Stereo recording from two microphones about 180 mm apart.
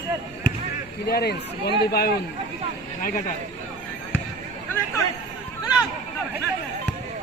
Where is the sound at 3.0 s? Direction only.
50° left (ahead or behind).